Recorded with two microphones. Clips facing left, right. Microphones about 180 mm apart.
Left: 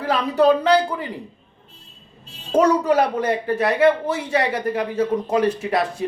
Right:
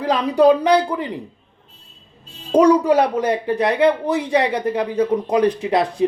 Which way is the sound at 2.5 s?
15° right (ahead or behind).